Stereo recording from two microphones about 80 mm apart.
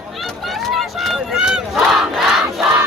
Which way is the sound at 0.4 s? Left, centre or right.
Centre.